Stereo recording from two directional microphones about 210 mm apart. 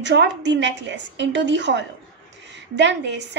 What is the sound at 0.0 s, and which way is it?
A woman's voice, 55° right (ahead or behind).